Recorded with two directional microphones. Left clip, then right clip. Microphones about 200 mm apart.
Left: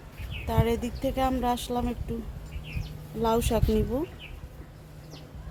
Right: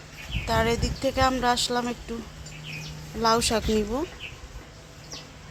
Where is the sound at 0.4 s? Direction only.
5° right (ahead or behind).